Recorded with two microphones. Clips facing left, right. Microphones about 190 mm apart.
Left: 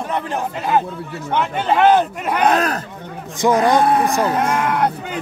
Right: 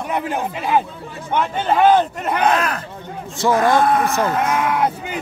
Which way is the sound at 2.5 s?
40° left (ahead or behind).